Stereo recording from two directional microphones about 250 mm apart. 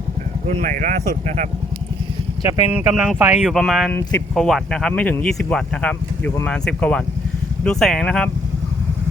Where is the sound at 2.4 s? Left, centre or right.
Centre.